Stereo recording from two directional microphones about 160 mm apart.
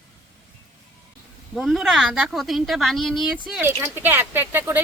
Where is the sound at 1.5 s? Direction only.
Centre (ahead or behind).